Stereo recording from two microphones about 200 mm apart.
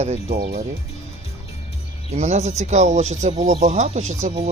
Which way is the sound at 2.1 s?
35° right (ahead or behind).